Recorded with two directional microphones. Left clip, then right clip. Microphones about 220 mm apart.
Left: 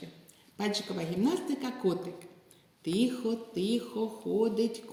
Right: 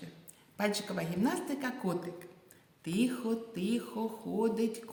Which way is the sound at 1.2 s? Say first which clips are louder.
Left 3 dB; 40° right (ahead or behind).